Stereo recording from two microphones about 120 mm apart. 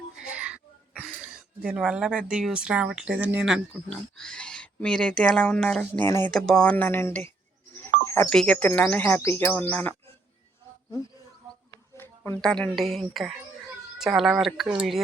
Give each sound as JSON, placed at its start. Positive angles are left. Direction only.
{"t": 0.2, "sound": "speech", "side_deg": -10}
{"t": 6.1, "sound": "speech", "side_deg": 20}
{"t": 6.3, "sound": "speech", "side_deg": 5}
{"t": 7.8, "sound": "a sound", "side_deg": 20}
{"t": 8.4, "sound": "speech", "side_deg": 10}
{"t": 11.9, "sound": "a sound", "side_deg": 20}
{"t": 12.4, "sound": "speech", "side_deg": 5}